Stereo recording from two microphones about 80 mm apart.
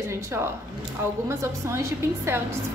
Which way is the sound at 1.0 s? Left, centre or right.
Right.